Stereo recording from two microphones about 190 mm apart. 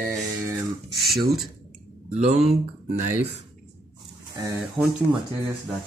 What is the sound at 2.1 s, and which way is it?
Speech, 35° right (ahead or behind).